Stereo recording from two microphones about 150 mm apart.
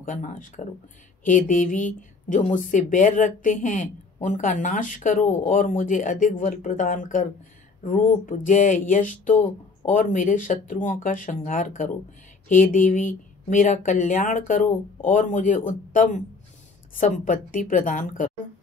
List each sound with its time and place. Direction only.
0.0 s speech: 60° left (ahead or behind)